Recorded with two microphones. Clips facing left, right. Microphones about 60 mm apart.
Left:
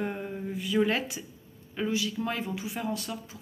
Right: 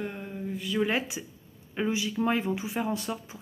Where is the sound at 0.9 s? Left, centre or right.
Centre.